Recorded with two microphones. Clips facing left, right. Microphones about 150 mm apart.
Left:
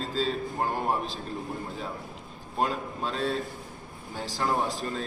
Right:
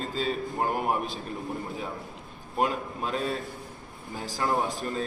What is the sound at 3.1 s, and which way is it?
A man's voice, 5° right (ahead or behind).